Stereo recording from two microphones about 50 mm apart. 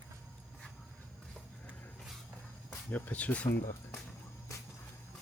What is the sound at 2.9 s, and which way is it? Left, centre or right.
Speech, left.